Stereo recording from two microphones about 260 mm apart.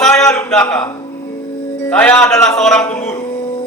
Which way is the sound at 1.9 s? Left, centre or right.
Centre.